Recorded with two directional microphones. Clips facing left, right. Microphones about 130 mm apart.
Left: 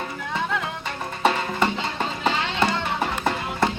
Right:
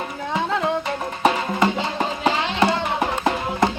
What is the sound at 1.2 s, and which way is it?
Music, 10° right (ahead or behind).